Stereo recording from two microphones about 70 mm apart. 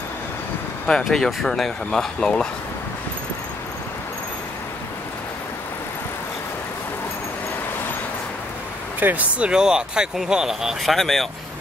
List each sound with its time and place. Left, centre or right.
0.8 s speech: centre
9.0 s speech: right
9.5 s speech: centre